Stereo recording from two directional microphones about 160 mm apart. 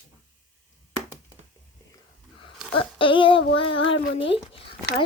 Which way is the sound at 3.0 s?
35° left (ahead or behind).